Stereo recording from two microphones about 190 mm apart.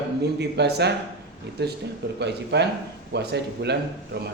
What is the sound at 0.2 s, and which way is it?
Speech, 60° right (ahead or behind).